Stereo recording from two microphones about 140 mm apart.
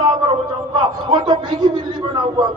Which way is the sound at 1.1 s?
30° right (ahead or behind).